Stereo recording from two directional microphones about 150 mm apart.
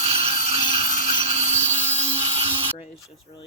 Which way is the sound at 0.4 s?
40° right (ahead or behind).